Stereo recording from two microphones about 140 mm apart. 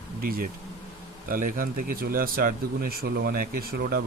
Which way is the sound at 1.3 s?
75° right (ahead or behind).